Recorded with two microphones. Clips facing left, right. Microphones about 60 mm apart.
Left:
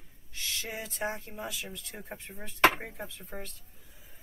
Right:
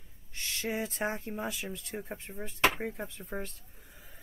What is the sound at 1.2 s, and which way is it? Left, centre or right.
Speech, right.